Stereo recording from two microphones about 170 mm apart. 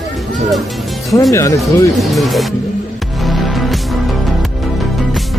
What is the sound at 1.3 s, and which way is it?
Speech, 15° left (ahead or behind).